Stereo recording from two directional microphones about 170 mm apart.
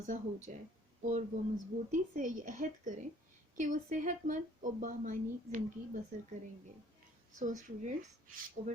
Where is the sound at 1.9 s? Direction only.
50° right (ahead or behind).